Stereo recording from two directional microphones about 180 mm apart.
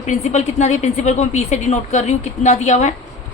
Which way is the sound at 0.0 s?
40° left (ahead or behind).